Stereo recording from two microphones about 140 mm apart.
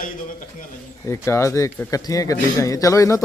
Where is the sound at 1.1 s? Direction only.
20° left (ahead or behind).